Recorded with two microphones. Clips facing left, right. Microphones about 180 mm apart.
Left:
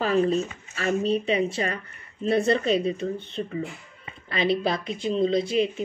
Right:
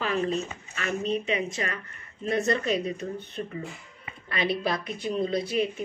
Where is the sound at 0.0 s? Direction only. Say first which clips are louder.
Left 5 dB; 35° left (ahead or behind).